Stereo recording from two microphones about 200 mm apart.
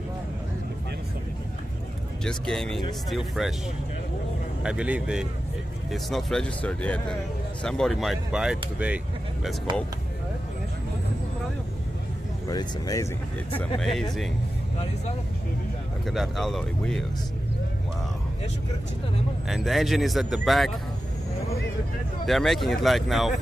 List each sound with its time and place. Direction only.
2.2 s speech: centre (ahead or behind)
4.6 s speech: 5° right (ahead or behind)
12.4 s speech: 20° left (ahead or behind)
13.7 s speech: centre (ahead or behind)
16.1 s speech: centre (ahead or behind)
19.5 s speech: centre (ahead or behind)
22.2 s speech: centre (ahead or behind)